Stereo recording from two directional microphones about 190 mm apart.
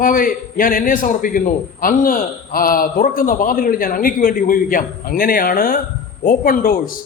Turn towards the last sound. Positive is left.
turn(degrees=50)  # may be behind; listen again after turning